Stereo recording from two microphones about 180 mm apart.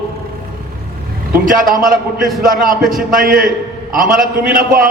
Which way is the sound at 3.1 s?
50° right (ahead or behind).